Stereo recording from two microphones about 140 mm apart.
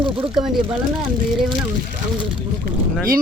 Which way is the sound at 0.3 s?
5° right (ahead or behind).